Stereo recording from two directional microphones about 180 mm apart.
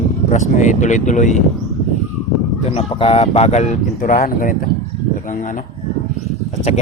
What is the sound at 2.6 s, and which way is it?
Speech, 30° left (ahead or behind).